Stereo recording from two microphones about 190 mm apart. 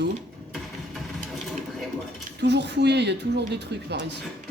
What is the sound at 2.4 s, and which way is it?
Speech, 60° right (ahead or behind).